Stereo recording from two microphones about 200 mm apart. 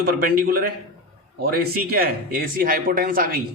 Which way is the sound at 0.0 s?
50° right (ahead or behind).